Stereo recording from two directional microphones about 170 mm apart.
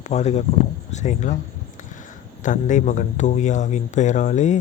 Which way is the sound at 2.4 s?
45° left (ahead or behind).